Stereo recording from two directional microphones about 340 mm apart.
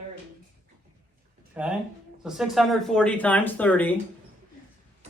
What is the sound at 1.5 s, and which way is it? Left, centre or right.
A man's voice, centre.